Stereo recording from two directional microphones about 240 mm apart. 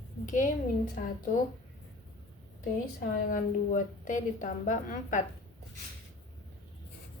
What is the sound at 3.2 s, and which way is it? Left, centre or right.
A woman's voice, left.